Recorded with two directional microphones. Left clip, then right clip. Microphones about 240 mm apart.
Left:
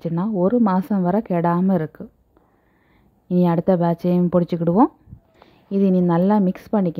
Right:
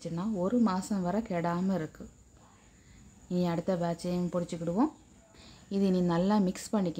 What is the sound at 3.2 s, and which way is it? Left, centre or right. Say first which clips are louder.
Speech: left 13 dB; left.